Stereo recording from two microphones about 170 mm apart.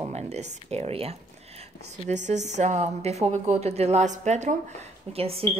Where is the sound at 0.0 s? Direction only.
40° right (ahead or behind).